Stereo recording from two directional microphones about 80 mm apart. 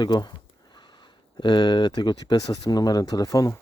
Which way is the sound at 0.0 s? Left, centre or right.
Left.